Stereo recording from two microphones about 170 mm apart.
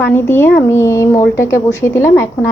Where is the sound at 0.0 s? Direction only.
10° left (ahead or behind).